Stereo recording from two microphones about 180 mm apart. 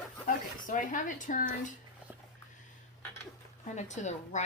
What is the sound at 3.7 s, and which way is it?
Speech, 40° left (ahead or behind).